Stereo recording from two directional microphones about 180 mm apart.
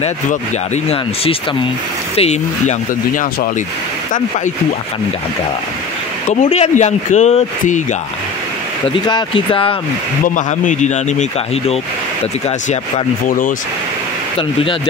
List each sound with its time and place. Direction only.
2.1 s a man's voice: 35° left (ahead or behind)
6.5 s a man's voice: 40° left (ahead or behind)
8.8 s speech: 25° left (ahead or behind)
10.2 s a man's voice: 45° left (ahead or behind)